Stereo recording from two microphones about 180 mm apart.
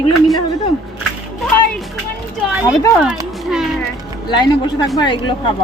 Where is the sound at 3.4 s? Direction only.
Centre (ahead or behind).